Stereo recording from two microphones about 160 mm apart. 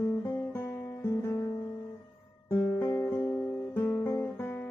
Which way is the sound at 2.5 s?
15° left (ahead or behind).